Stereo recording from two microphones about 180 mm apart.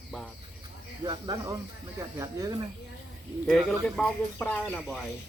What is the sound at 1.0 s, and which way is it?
Speech, 20° right (ahead or behind).